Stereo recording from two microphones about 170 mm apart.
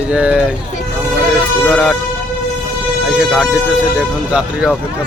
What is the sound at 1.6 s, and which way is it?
Speech, centre (ahead or behind).